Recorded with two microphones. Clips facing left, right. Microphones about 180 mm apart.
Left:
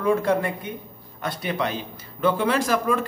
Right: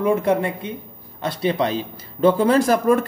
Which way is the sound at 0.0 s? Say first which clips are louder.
Right 3 dB; 20° right (ahead or behind).